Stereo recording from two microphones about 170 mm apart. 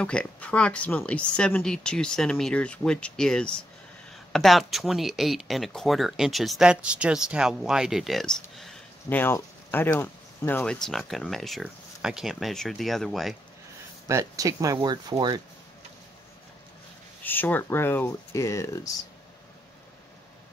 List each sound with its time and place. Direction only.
0.0 s speech: 5° left (ahead or behind)
14.0 s speech: 20° right (ahead or behind)
17.2 s speech: 10° left (ahead or behind)